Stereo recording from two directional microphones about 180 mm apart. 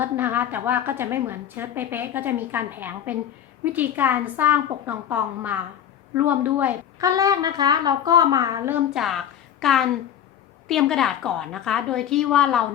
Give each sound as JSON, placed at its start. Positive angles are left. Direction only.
{"t": 0.0, "sound": "a woman's voice", "side_deg": -10}